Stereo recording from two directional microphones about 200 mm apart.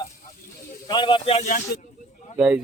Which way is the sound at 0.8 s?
25° left (ahead or behind).